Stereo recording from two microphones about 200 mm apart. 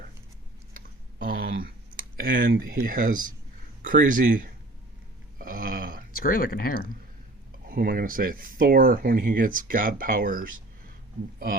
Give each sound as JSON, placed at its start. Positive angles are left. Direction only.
{"t": 1.2, "sound": "a sound", "side_deg": -45}
{"t": 2.8, "sound": "speech", "side_deg": -40}
{"t": 5.4, "sound": "burping", "side_deg": -45}
{"t": 6.1, "sound": "speech", "side_deg": 45}
{"t": 7.7, "sound": "speech", "side_deg": -50}